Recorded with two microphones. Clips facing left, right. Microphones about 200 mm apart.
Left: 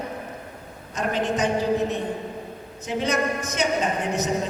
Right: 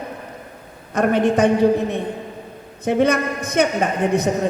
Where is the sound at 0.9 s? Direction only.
60° right (ahead or behind).